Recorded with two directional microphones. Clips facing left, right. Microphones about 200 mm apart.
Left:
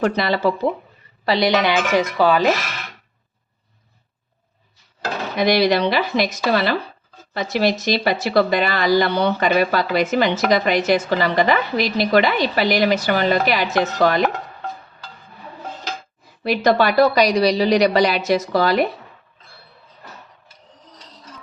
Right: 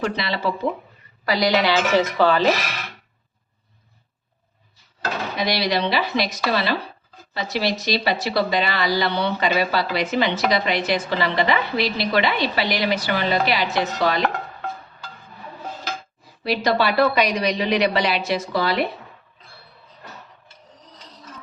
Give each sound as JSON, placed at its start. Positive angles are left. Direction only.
{"t": 0.0, "sound": "speech", "side_deg": 45}
{"t": 1.2, "sound": "speech", "side_deg": 25}
{"t": 5.4, "sound": "speech", "side_deg": 50}
{"t": 16.4, "sound": "a woman's voice", "side_deg": 50}